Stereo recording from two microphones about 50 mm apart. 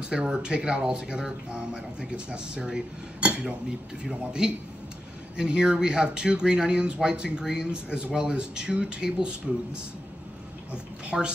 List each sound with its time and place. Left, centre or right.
0.1 s speech: centre
11.1 s speech: centre